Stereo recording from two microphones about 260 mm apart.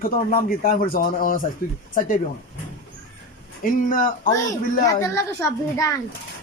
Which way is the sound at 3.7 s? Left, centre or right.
Left.